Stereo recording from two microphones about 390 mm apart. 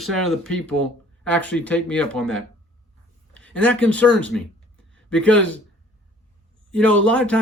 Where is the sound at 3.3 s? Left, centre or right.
Centre.